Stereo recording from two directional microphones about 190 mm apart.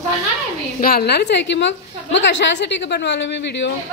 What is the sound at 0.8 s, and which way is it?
A woman's voice, 50° left (ahead or behind).